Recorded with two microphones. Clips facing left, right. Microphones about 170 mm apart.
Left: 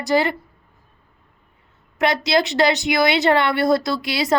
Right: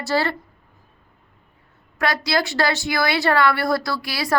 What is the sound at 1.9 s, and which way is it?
A woman's voice, 20° left (ahead or behind).